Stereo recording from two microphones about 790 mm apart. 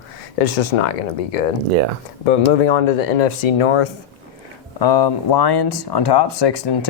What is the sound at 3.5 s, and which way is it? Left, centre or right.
Speech, left.